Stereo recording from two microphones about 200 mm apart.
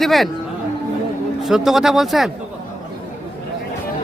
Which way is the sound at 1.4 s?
Centre (ahead or behind).